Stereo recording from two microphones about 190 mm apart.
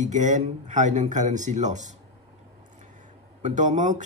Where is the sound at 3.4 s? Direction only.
40° right (ahead or behind).